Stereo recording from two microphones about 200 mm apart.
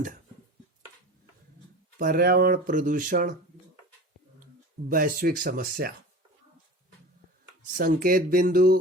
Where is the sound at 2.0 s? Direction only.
45° right (ahead or behind).